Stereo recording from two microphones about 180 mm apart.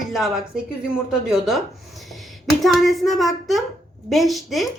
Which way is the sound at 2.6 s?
Centre (ahead or behind).